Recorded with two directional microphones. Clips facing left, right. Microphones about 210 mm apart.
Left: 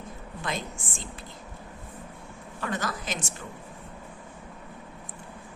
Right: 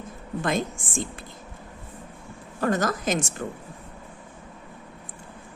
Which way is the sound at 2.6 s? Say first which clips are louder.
Right 8 dB; 45° right (ahead or behind).